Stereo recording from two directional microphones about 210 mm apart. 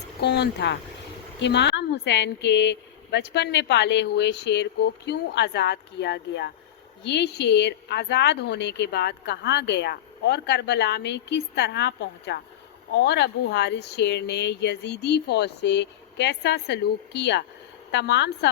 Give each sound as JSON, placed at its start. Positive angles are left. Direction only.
{"t": 0.2, "sound": "speech", "side_deg": 55}